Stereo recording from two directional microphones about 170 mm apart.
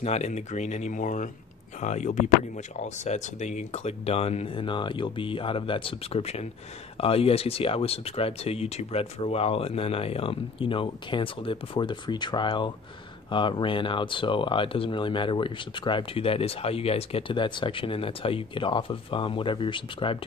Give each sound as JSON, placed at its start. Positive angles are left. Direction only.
{"t": 0.0, "sound": "speech", "side_deg": 40}